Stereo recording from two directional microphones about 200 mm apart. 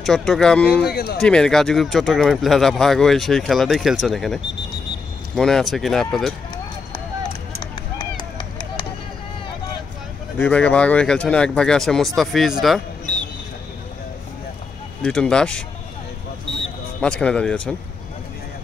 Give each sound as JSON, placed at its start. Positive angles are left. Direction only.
{"t": 0.0, "sound": "speech", "side_deg": 0}
{"t": 0.8, "sound": "speech", "side_deg": 50}
{"t": 1.2, "sound": "speech", "side_deg": 5}
{"t": 8.0, "sound": "a sound", "side_deg": 20}
{"t": 10.4, "sound": "speech", "side_deg": 5}
{"t": 15.0, "sound": "speech", "side_deg": 5}
{"t": 17.0, "sound": "speech", "side_deg": 5}